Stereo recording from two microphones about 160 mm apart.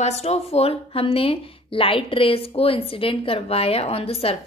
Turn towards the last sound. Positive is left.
turn(degrees=40)  # may be behind; listen again after turning